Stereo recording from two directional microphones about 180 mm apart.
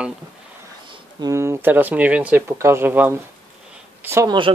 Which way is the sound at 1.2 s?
15° right (ahead or behind).